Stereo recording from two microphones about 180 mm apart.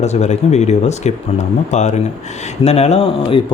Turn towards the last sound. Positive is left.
turn(degrees=35)  # may be behind; listen again after turning